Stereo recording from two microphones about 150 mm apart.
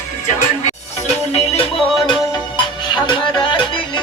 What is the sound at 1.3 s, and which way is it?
Music, 45° left (ahead or behind).